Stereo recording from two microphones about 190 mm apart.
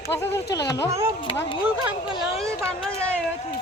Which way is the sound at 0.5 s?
20° left (ahead or behind).